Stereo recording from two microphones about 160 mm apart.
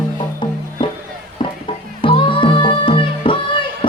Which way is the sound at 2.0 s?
30° left (ahead or behind).